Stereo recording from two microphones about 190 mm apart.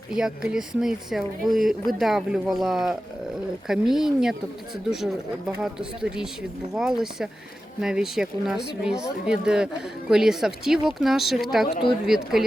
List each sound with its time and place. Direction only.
0.1 s speech: 5° right (ahead or behind)